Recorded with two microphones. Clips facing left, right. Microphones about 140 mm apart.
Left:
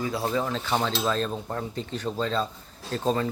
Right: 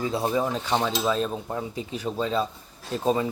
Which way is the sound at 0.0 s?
20° right (ahead or behind).